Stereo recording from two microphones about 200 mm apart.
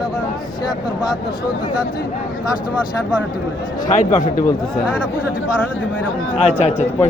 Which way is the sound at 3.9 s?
35° left (ahead or behind).